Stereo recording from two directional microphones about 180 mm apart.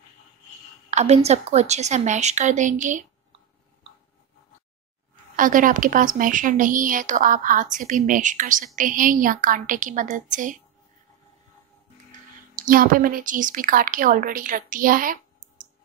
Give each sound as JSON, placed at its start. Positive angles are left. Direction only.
{"t": 0.8, "sound": "a woman's voice", "side_deg": -40}
{"t": 5.3, "sound": "a woman's voice", "side_deg": -50}
{"t": 12.1, "sound": "a woman's voice", "side_deg": -50}